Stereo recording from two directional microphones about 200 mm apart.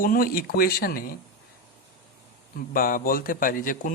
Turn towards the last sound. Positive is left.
turn(degrees=40)  # may be behind; listen again after turning